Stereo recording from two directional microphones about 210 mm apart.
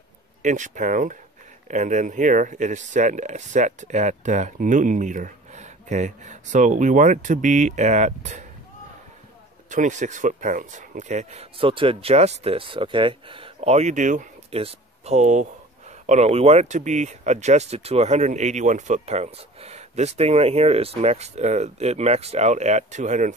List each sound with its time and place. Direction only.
0.4 s speech: 35° right (ahead or behind)
9.7 s speech: 35° right (ahead or behind)